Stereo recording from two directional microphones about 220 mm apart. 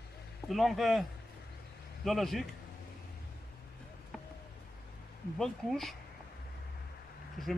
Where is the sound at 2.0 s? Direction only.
Centre (ahead or behind).